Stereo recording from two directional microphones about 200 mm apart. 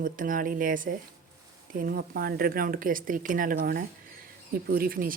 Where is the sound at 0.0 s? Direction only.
45° right (ahead or behind).